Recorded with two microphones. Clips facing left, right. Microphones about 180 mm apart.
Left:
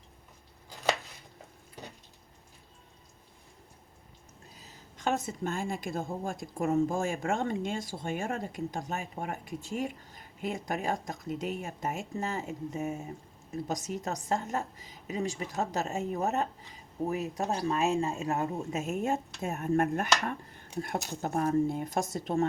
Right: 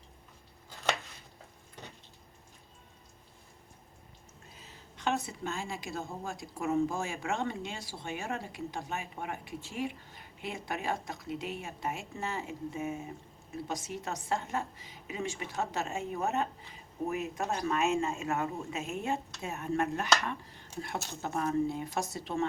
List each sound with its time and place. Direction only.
0.7 s chopping: 15° left (ahead or behind)
4.5 s a woman's voice: 40° left (ahead or behind)